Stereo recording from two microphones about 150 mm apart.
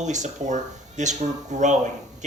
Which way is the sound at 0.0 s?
50° right (ahead or behind).